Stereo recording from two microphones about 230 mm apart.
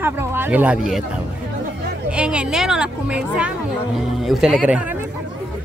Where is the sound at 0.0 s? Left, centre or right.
Centre.